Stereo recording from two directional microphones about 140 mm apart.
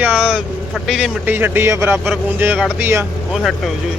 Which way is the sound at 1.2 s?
15° right (ahead or behind).